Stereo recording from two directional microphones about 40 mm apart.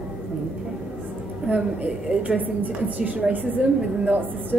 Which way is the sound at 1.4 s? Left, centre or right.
Right.